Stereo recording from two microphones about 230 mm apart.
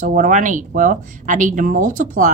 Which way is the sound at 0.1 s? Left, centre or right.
Right.